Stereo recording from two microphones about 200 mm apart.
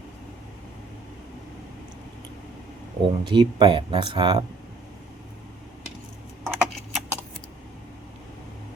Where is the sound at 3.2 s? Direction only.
20° right (ahead or behind).